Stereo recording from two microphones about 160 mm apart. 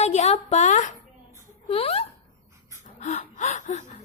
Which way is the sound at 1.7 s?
40° left (ahead or behind).